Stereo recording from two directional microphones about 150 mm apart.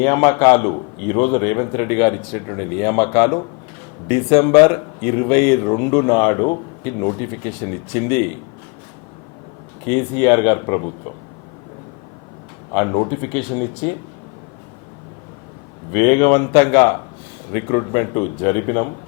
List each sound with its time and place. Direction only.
0.0 s a man's voice: 20° left (ahead or behind)
9.8 s speech: 15° left (ahead or behind)
12.7 s a man's voice: 20° left (ahead or behind)
15.9 s a man's voice: 15° left (ahead or behind)